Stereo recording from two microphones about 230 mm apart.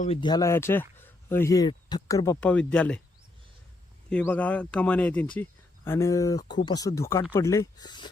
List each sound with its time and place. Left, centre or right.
0.0 s speech: left; by 3.0 s centre
4.1 s speech: centre